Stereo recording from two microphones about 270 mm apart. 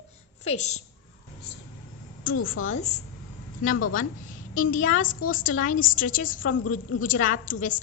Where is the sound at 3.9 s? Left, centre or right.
Left.